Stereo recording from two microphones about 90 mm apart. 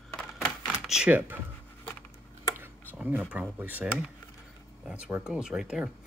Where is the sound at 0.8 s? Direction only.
5° right (ahead or behind).